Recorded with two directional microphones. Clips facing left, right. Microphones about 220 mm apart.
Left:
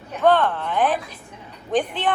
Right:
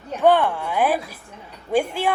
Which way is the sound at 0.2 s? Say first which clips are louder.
Right 1 dB; 15° right (ahead or behind).